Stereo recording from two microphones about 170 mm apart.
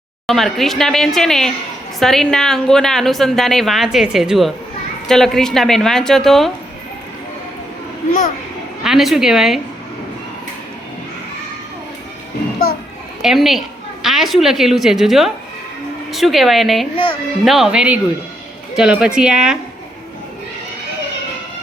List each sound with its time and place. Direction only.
0.3 s a woman's voice: centre (ahead or behind)
8.8 s a woman's voice: centre (ahead or behind)
13.2 s a woman's voice: centre (ahead or behind)
16.9 s a woman's voice: 30° left (ahead or behind)
17.4 s a woman's voice: centre (ahead or behind)